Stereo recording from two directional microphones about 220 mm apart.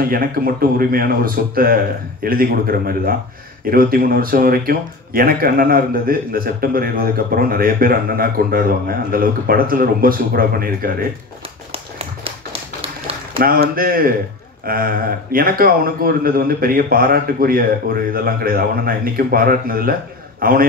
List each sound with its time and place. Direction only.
0.1 s speech: 40° right (ahead or behind)
12.8 s a sound: 25° right (ahead or behind)
13.4 s speech: 40° right (ahead or behind)